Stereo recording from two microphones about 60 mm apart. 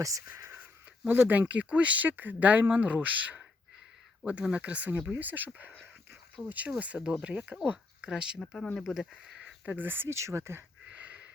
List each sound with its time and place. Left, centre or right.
0.6 s speech: right
6.4 s speech: centre
6.7 s speech: right
8.1 s speech: centre
9.6 s speech: right
10.2 s speech: right
10.8 s a sound: right